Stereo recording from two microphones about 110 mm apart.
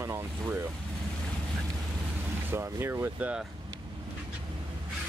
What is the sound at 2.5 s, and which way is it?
Speech, 20° right (ahead or behind).